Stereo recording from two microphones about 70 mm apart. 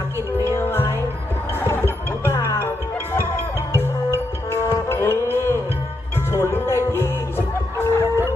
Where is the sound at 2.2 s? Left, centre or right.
Left.